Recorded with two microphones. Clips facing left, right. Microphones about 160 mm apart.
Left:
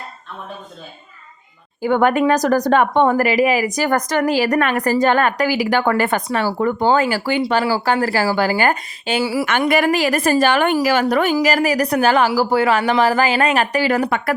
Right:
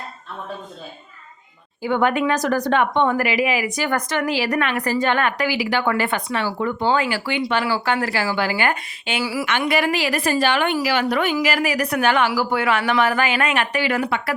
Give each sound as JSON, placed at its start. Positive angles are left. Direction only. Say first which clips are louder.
{"t": 1.8, "sound": "a woman's voice", "louder": "left 4 dB", "side_deg": 45}
{"t": 9.5, "sound": "a woman's voice", "louder": "left 3 dB", "side_deg": 50}